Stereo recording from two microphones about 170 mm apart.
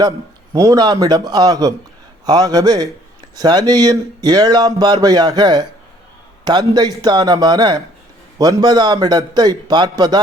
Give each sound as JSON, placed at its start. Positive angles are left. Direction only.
{"t": 0.5, "sound": "speech", "side_deg": -20}